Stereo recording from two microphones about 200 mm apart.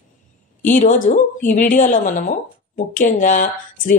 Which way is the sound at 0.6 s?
40° left (ahead or behind).